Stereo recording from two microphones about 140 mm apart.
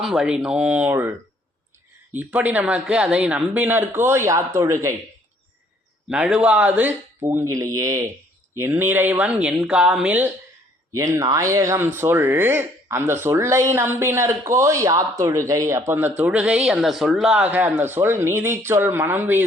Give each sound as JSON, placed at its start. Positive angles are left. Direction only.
{"t": 0.0, "sound": "speech", "side_deg": -5}
{"t": 2.1, "sound": "speech", "side_deg": -10}
{"t": 6.1, "sound": "speech", "side_deg": -5}
{"t": 10.9, "sound": "speech", "side_deg": -25}